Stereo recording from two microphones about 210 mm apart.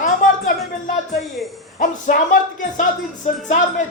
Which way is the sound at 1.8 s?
40° left (ahead or behind).